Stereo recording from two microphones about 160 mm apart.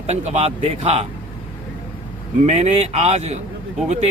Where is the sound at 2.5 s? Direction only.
40° right (ahead or behind).